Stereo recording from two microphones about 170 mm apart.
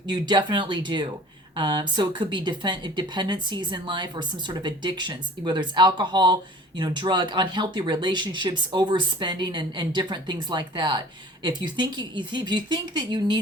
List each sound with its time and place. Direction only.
0.1 s speech: 25° right (ahead or behind)